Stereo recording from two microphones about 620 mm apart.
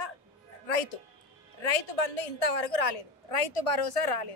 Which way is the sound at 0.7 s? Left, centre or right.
Left.